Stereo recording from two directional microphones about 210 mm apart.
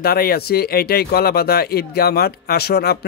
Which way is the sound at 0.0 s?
45° left (ahead or behind).